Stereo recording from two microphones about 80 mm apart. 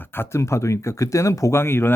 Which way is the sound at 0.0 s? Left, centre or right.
Left.